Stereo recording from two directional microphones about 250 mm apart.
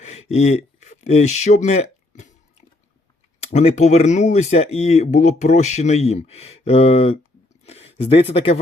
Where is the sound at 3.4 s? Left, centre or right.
Left.